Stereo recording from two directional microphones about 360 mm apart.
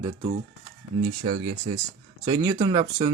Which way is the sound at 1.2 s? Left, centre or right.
Centre.